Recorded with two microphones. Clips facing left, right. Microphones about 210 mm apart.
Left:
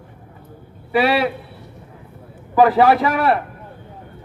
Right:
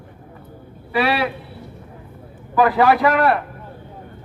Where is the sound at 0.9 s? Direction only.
25° left (ahead or behind).